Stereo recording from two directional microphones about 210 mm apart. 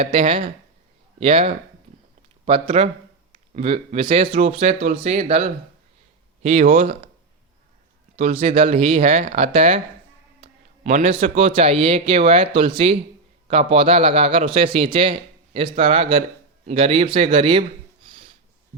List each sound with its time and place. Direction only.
0.0 s a man's voice: 25° right (ahead or behind)
8.1 s a man's voice: 30° right (ahead or behind)